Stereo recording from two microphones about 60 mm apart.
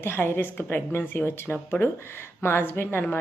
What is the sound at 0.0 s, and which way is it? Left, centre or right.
A woman's voice, left.